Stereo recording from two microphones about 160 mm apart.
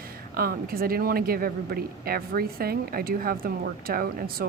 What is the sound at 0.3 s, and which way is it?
Speech, 65° right (ahead or behind).